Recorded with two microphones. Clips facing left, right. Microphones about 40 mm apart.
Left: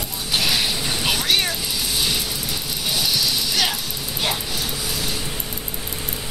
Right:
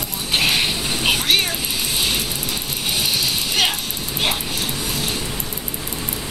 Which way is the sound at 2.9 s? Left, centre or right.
Right.